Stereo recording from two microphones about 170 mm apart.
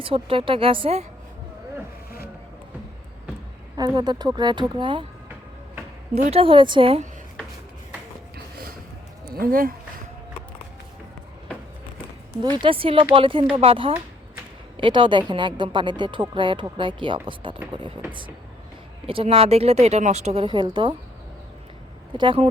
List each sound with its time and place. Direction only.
0.0 s speech: 30° right (ahead or behind)
3.8 s a woman's voice: 25° right (ahead or behind)
6.1 s speech: 40° right (ahead or behind)
9.2 s speech: 60° right (ahead or behind)
12.6 s a woman's voice: 30° right (ahead or behind)
19.0 s speech: 30° right (ahead or behind)
22.2 s speech: 30° right (ahead or behind)